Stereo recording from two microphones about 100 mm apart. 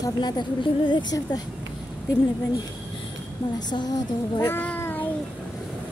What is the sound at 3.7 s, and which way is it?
Speech, 45° left (ahead or behind).